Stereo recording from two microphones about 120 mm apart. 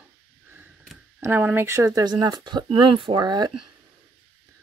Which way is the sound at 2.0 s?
35° right (ahead or behind).